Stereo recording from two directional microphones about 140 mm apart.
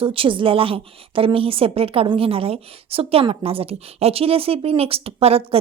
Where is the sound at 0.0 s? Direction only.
40° right (ahead or behind).